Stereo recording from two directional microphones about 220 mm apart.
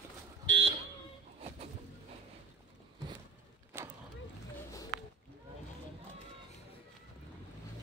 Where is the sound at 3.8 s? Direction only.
10° right (ahead or behind).